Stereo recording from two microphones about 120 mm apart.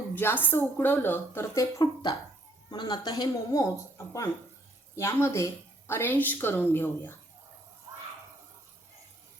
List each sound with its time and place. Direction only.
0.1 s speech: 15° left (ahead or behind)
1.8 s speech: 35° left (ahead or behind); by 7.2 s 20° left (ahead or behind)